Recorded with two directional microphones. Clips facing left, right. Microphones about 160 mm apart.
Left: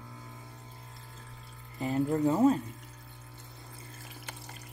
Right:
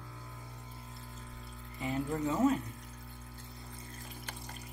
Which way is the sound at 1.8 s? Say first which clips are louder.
Left 6 dB; 35° left (ahead or behind).